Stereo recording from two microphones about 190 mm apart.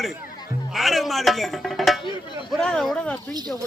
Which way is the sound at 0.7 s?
Centre (ahead or behind).